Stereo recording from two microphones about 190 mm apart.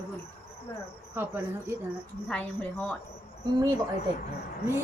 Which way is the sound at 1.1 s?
10° right (ahead or behind).